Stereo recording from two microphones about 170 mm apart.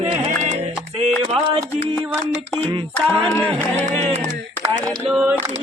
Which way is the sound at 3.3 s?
5° left (ahead or behind).